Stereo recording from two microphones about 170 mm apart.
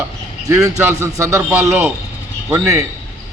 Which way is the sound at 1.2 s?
15° right (ahead or behind).